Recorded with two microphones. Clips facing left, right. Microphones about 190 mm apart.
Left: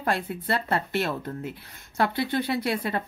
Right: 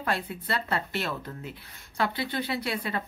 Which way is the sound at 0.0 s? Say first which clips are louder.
Left 3 dB; 50° left (ahead or behind).